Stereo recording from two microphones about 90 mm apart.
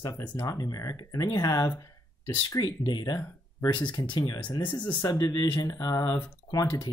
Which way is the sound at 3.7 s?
60° left (ahead or behind).